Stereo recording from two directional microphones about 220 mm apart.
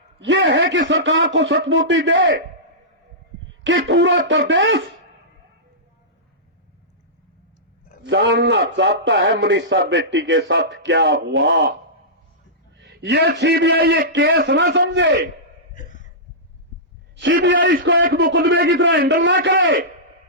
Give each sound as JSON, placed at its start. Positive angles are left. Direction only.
{"t": 0.2, "sound": "a man's voice", "side_deg": -55}
{"t": 3.6, "sound": "a man's voice", "side_deg": -55}
{"t": 8.0, "sound": "a man's voice", "side_deg": -55}
{"t": 12.7, "sound": "a man's voice", "side_deg": -55}
{"t": 15.7, "sound": "a sound", "side_deg": 35}
{"t": 17.2, "sound": "a man's voice", "side_deg": -55}